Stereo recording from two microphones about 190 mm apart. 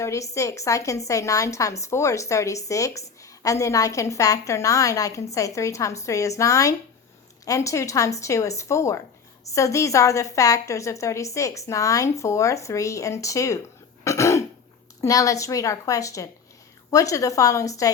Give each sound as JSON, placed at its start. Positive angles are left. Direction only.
{"t": 0.0, "sound": "a woman's voice", "side_deg": 15}
{"t": 14.0, "sound": "cough", "side_deg": 15}
{"t": 15.0, "sound": "a woman's voice", "side_deg": 15}